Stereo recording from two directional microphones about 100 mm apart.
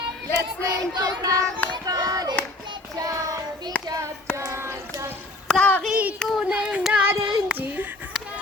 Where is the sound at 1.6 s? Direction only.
50° right (ahead or behind).